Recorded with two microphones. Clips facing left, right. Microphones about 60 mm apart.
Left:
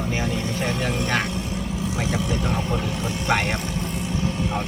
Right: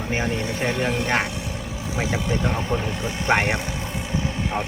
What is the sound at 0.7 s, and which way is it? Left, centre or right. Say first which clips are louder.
Vehicle: right 2 dB; right.